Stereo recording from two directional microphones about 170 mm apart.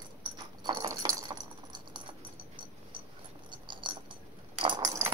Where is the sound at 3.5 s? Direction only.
25° right (ahead or behind).